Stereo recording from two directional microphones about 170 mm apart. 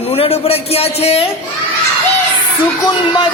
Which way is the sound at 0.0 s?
35° left (ahead or behind).